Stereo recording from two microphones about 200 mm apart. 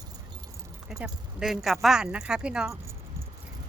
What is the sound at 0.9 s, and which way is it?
Speech, 5° right (ahead or behind).